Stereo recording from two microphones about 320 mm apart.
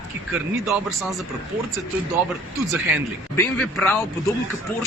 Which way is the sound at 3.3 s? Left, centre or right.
Centre.